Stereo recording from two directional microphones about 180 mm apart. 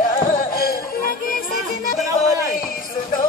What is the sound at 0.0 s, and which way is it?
Music, 50° left (ahead or behind).